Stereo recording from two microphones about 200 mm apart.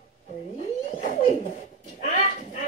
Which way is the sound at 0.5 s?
40° left (ahead or behind).